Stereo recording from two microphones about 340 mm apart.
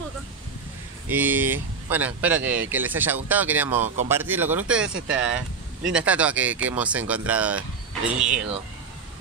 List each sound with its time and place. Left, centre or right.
1.0 s speech: centre
3.8 s speech: right
4.1 s speech: centre
4.8 s speech: right
5.9 s speech: centre